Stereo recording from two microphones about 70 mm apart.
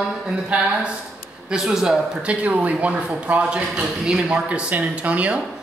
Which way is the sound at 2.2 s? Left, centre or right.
Right.